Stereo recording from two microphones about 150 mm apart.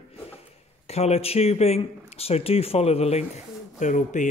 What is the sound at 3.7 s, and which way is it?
Speech, 55° left (ahead or behind).